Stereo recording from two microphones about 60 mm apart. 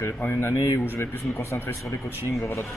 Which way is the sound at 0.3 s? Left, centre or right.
Left.